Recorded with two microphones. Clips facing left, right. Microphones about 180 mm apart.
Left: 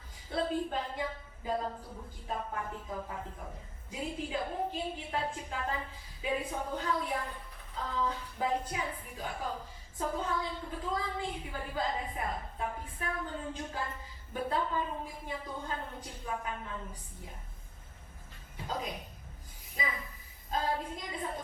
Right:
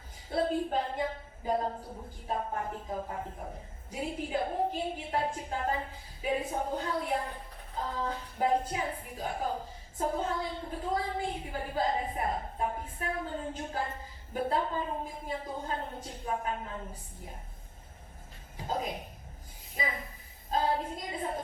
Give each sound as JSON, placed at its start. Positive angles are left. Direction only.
{"t": 0.4, "sound": "a woman's voice", "side_deg": -35}
{"t": 6.3, "sound": "a woman's voice", "side_deg": -25}
{"t": 6.6, "sound": "a woman's voice", "side_deg": -40}
{"t": 6.8, "sound": "a woman's voice", "side_deg": -25}
{"t": 8.8, "sound": "a woman's voice", "side_deg": -40}
{"t": 18.5, "sound": "a woman's voice", "side_deg": -30}